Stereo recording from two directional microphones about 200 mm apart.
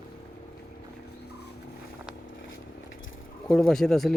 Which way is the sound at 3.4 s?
Centre (ahead or behind).